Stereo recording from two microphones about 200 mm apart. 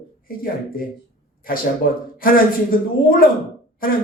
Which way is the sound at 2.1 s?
45° left (ahead or behind).